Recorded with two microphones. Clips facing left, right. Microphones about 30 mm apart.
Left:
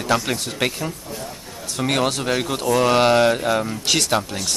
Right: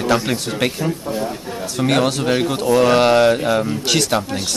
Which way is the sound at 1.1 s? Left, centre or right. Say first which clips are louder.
Right 9 dB; right.